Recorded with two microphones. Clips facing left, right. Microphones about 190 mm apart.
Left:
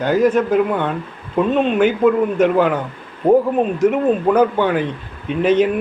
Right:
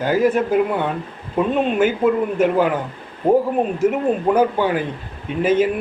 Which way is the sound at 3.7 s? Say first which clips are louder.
Left 3 dB; 10° right (ahead or behind).